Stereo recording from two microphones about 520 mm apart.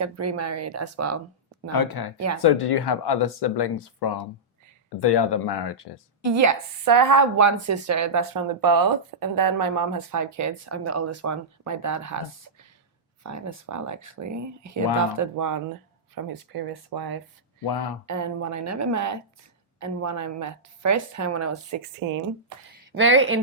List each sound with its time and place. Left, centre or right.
0.0 s speech: right
1.7 s speech: left
2.1 s speech: right
2.4 s speech: left
6.3 s speech: right
13.2 s speech: right
17.7 s speech: left
18.0 s speech: right